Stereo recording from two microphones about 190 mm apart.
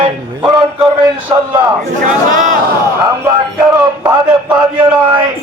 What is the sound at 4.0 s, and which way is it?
Speech, 25° right (ahead or behind).